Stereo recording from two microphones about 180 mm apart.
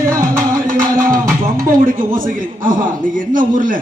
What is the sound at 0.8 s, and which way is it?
Music, 50° right (ahead or behind).